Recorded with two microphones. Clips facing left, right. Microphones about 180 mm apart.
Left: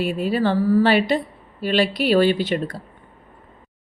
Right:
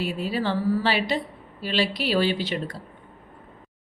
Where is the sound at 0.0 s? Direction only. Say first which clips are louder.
Left 6 dB; 55° left (ahead or behind).